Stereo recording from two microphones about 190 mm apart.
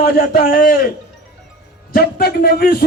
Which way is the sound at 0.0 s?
50° left (ahead or behind).